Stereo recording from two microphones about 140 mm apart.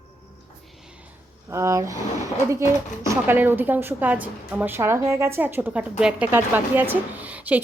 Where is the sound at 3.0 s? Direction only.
20° right (ahead or behind).